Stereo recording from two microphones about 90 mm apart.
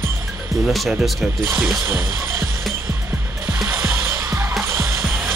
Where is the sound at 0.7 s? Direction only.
Centre (ahead or behind).